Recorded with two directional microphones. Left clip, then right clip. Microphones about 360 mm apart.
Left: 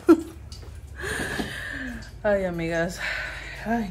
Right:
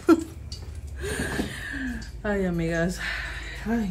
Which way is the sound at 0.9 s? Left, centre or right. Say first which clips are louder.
Left 1 dB; centre.